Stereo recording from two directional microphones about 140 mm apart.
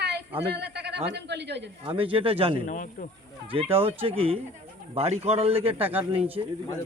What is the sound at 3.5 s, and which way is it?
Speech, 40° right (ahead or behind).